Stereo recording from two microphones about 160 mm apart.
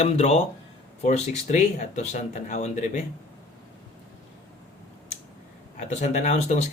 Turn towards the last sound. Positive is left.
turn(degrees=45)  # may be behind; listen again after turning